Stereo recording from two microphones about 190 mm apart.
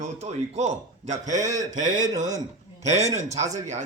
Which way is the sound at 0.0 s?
35° right (ahead or behind).